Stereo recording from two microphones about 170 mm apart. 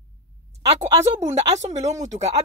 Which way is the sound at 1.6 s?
40° right (ahead or behind).